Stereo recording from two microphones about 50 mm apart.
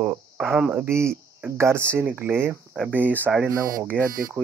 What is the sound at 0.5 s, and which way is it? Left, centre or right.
Speech, right.